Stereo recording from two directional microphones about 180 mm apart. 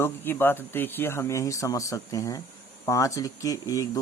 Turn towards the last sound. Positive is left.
turn(degrees=20)  # may be behind; listen again after turning